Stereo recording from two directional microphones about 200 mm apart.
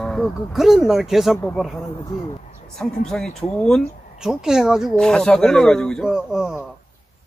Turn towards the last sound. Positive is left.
turn(degrees=-5)  # may be behind; listen again after turning